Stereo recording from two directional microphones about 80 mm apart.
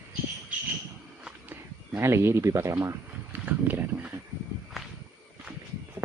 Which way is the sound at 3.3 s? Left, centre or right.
Right.